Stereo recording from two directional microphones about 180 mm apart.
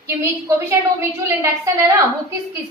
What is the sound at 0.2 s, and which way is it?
Speech, 15° right (ahead or behind).